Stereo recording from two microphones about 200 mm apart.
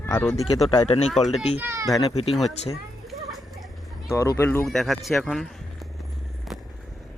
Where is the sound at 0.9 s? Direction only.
30° left (ahead or behind).